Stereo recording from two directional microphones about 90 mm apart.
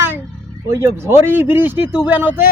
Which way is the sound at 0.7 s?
30° right (ahead or behind).